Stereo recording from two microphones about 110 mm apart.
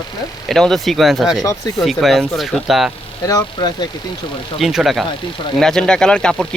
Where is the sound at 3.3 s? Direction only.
40° left (ahead or behind).